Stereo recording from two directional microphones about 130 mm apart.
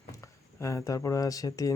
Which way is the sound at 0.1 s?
25° left (ahead or behind).